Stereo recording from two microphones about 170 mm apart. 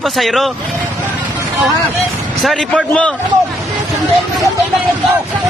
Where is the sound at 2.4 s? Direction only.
Centre (ahead or behind).